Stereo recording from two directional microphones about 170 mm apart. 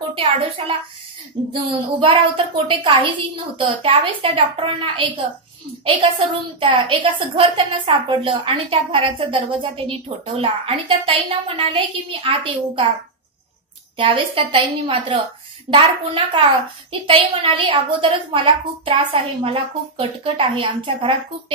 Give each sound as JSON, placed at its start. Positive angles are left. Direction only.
{"t": 0.1, "sound": "a woman's voice", "side_deg": -30}
{"t": 6.6, "sound": "a woman's voice", "side_deg": -30}
{"t": 13.9, "sound": "a woman's voice", "side_deg": -30}